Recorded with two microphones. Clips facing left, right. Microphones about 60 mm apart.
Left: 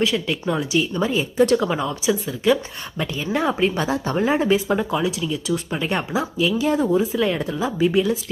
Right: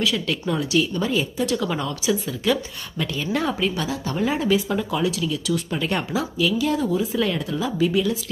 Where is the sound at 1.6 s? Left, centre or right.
Centre.